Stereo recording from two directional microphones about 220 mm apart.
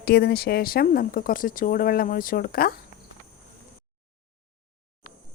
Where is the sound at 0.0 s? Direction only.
45° left (ahead or behind).